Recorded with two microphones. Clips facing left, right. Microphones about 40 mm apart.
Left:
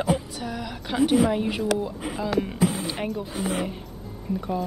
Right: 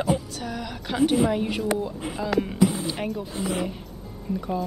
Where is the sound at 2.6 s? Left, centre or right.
Left.